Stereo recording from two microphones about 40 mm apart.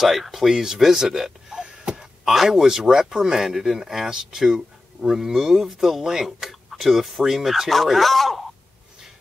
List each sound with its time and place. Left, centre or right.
0.0 s speech: centre
1.6 s a sound: right
2.2 s speech: centre